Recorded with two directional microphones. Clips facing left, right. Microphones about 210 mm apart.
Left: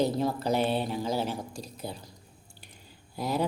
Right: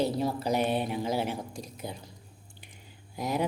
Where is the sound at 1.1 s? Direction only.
55° right (ahead or behind).